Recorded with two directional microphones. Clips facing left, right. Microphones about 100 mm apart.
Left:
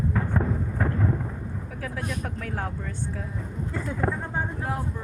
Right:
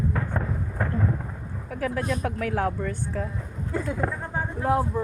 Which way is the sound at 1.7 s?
70° right (ahead or behind).